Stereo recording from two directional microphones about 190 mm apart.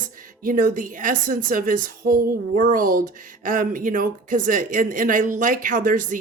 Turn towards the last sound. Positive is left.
turn(degrees=-45)  # may be behind; listen again after turning